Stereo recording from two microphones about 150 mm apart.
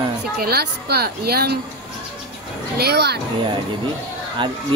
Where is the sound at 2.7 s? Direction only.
90° right.